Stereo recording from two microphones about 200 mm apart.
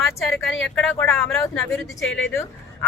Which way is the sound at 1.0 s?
5° left (ahead or behind).